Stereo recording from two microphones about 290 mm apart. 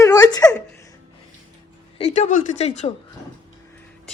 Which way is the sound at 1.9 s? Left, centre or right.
Left.